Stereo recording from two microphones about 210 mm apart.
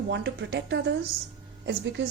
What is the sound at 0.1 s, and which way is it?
A woman's voice, 55° right (ahead or behind).